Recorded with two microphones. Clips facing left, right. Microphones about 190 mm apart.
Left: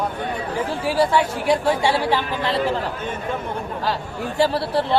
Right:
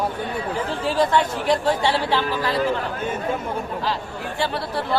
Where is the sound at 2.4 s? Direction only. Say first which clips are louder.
Even; 25° left (ahead or behind).